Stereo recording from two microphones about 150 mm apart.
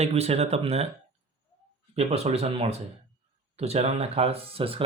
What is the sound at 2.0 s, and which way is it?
Speech, 45° right (ahead or behind).